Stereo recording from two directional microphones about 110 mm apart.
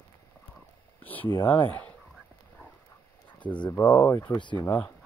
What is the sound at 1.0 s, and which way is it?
Speech, 15° left (ahead or behind).